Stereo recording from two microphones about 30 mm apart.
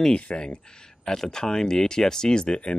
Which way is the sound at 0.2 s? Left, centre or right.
Left.